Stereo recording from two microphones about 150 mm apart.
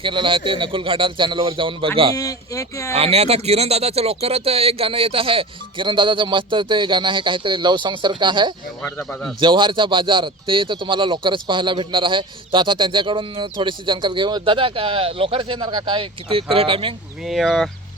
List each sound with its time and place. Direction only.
0.0 s speech: 35° right (ahead or behind)
2.1 s speech: 20° left (ahead or behind)
2.9 s speech: 45° right (ahead or behind)
17.2 s speech: centre (ahead or behind)